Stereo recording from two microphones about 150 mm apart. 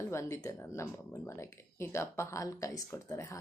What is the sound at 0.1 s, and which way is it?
Speech, 20° left (ahead or behind).